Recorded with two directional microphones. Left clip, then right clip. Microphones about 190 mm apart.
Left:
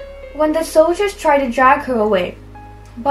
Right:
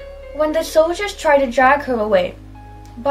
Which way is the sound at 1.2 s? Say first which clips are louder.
Even; 15° right (ahead or behind).